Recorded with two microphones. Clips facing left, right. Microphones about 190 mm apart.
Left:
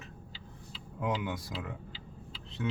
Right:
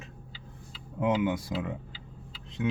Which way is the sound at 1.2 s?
25° right (ahead or behind).